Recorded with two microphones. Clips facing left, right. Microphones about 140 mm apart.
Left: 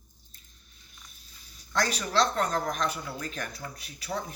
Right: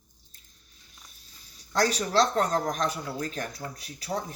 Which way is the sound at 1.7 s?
35° right (ahead or behind).